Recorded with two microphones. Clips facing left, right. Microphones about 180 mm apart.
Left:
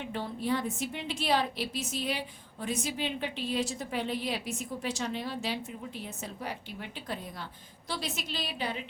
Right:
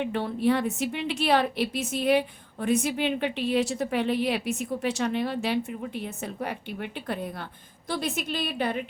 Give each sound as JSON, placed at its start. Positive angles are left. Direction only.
{"t": 0.0, "sound": "a woman's voice", "side_deg": -65}